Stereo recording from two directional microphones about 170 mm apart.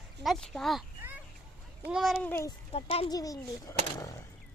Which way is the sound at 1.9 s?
Centre (ahead or behind).